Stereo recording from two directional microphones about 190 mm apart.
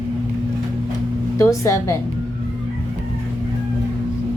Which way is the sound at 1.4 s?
15° left (ahead or behind).